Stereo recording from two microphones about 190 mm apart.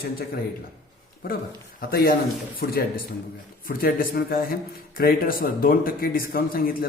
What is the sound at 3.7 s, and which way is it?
A man's voice, 50° left (ahead or behind).